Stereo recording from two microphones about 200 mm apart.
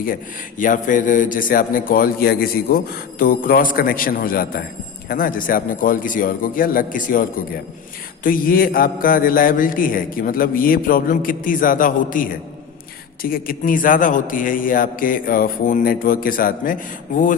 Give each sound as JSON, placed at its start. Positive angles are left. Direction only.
{"t": 0.6, "sound": "a man's voice", "side_deg": 40}
{"t": 13.3, "sound": "a man's voice", "side_deg": 45}